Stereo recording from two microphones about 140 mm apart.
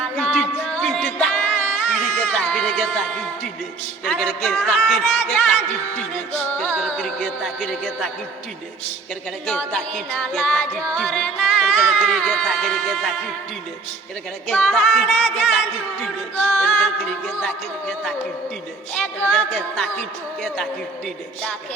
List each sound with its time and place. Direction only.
0.0 s music: 5° left (ahead or behind)
4.0 s music: 5° left (ahead or behind)
6.8 s music: 5° left (ahead or behind)
9.5 s music: 5° left (ahead or behind)
14.4 s music: 5° left (ahead or behind)
18.9 s music: centre (ahead or behind)